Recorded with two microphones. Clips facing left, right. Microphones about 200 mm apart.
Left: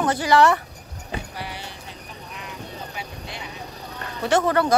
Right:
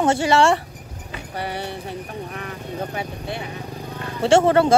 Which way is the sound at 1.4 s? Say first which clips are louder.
Right 7 dB; 60° right (ahead or behind).